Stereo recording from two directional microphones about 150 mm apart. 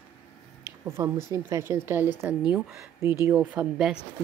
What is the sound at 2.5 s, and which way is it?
Speech, 5° right (ahead or behind).